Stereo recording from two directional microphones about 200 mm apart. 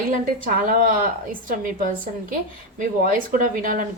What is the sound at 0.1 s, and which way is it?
A woman's voice, 40° right (ahead or behind).